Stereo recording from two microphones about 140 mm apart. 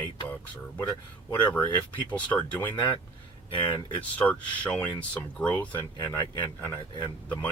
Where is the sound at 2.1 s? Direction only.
10° left (ahead or behind).